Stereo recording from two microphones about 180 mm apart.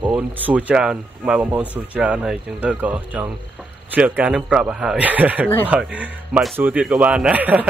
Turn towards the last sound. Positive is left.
turn(degrees=-10)  # may be behind; listen again after turning